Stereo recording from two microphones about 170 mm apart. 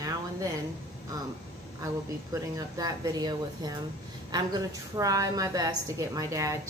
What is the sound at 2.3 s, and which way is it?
A woman's voice, 20° right (ahead or behind).